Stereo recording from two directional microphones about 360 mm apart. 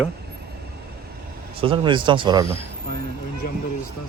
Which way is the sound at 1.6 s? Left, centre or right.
Centre.